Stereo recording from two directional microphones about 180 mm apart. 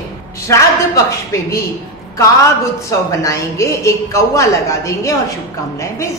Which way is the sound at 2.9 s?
15° left (ahead or behind).